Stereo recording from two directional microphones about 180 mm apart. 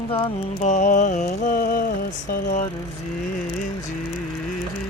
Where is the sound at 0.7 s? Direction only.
45° left (ahead or behind).